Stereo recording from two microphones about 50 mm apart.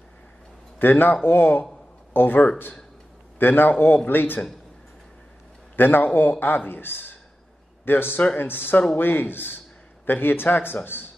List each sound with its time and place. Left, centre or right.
0.7 s a man's voice: left
5.8 s a man's voice: left